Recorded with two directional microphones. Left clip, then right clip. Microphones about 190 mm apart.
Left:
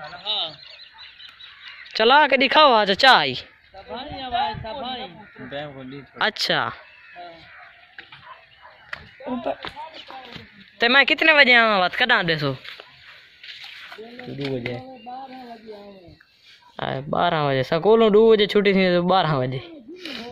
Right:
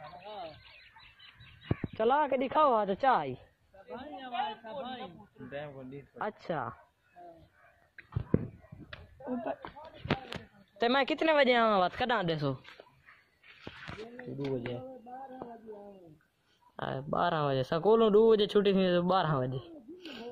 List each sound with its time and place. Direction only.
0.2 s fowl: 25° right (ahead or behind)
2.0 s speech: 25° left (ahead or behind)
3.9 s a sound: 60° left (ahead or behind)
5.5 s speech: 5° right (ahead or behind)
6.1 s speech: 20° left (ahead or behind)
9.2 s speech: 60° left (ahead or behind)
10.8 s speech: 10° right (ahead or behind)
16.7 s speech: centre (ahead or behind)
20.0 s a sound: 10° right (ahead or behind)